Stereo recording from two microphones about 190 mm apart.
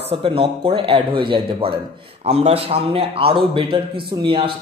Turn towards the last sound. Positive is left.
turn(degrees=-25)  # may be behind; listen again after turning